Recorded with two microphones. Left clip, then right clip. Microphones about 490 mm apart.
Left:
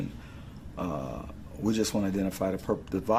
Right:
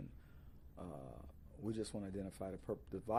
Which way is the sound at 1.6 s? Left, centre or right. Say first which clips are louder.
Left 16 dB; right.